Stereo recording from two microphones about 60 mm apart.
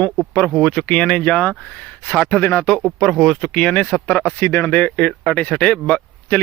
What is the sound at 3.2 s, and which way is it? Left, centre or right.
Speech, centre.